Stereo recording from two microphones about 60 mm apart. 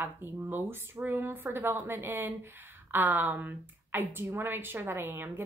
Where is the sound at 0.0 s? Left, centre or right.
Right.